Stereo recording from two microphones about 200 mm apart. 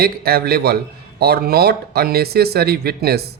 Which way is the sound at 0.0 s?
50° right (ahead or behind).